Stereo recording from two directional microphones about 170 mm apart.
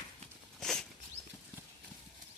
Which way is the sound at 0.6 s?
5° left (ahead or behind).